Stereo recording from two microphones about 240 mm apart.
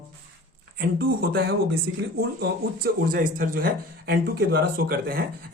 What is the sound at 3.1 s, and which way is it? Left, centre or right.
Speech, right.